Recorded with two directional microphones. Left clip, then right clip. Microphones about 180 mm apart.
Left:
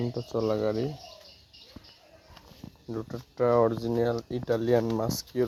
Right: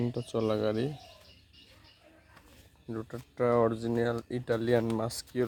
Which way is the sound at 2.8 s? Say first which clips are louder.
Left 3 dB; centre (ahead or behind).